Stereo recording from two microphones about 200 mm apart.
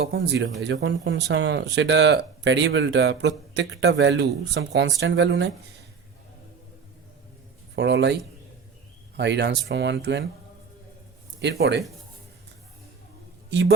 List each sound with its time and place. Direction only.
0.0 s speech: 55° right (ahead or behind)
7.8 s speech: 60° right (ahead or behind)
11.3 s speech: 55° right (ahead or behind)
13.5 s a man's voice: 60° right (ahead or behind)